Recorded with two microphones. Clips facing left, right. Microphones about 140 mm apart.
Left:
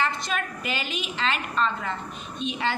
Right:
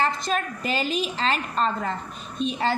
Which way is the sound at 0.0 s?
35° right (ahead or behind).